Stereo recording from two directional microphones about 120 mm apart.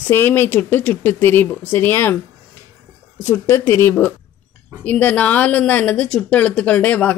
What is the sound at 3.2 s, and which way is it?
Speech, 20° left (ahead or behind).